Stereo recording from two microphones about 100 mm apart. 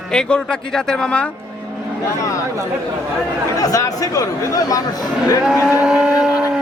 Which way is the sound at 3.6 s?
35° left (ahead or behind).